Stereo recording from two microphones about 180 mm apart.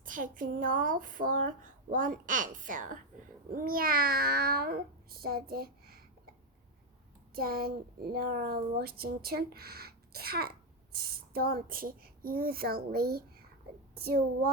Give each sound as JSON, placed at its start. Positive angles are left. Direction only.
{"t": 0.0, "sound": "speech", "side_deg": -50}
{"t": 7.3, "sound": "speech", "side_deg": -55}